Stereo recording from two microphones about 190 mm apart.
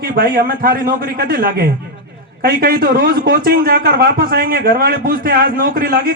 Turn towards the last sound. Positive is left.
turn(degrees=-55)  # may be behind; listen again after turning